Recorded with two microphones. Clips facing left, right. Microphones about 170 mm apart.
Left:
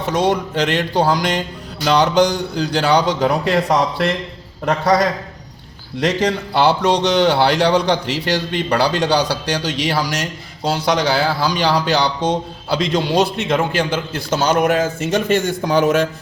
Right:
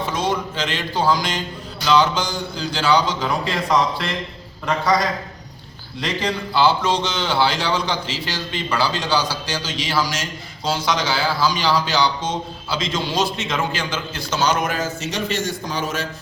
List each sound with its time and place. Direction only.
0.2 s a man's voice: 65° left (ahead or behind)
6.2 s a man's voice: 70° left (ahead or behind)